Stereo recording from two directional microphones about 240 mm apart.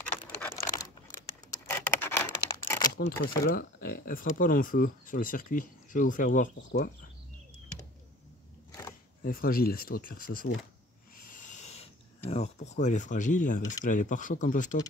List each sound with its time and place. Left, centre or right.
0.7 s a sound: centre
3.4 s speech: left
9.2 s speech: left
11.1 s owl: left
12.3 s speech: left